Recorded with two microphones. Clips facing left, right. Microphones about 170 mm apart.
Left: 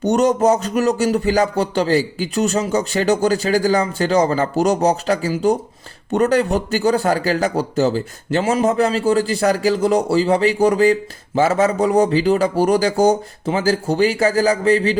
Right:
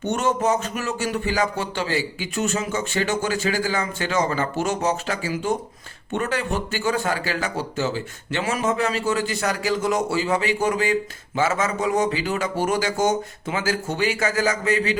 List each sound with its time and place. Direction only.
0.0 s speech: 40° left (ahead or behind)